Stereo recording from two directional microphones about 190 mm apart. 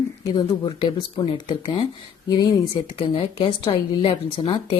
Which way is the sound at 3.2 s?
30° left (ahead or behind).